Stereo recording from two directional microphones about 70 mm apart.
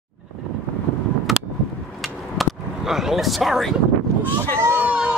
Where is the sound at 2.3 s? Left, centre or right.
Centre.